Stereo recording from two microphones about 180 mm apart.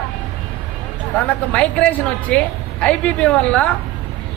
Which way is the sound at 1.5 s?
5° left (ahead or behind).